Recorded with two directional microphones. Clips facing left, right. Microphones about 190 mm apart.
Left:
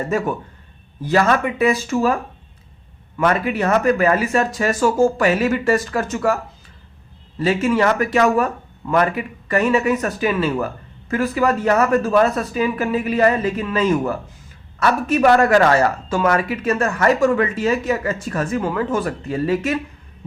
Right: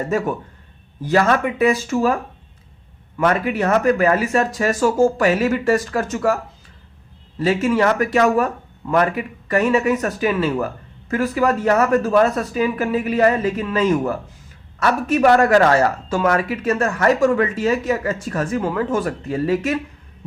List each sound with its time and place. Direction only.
1.0 s speech: 45° right (ahead or behind)
3.2 s speech: 45° right (ahead or behind)